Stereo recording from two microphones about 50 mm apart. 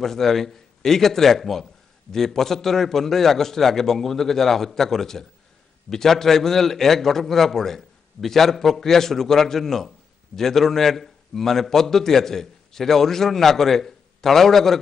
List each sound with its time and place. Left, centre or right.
0.0 s a man's voice: centre